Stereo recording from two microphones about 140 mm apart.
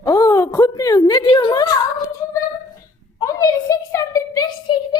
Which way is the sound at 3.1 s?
25° left (ahead or behind).